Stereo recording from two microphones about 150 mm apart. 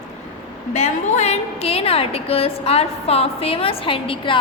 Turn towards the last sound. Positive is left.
turn(degrees=35)  # may be behind; listen again after turning